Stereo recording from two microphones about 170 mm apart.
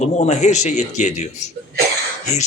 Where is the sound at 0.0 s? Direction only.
45° left (ahead or behind).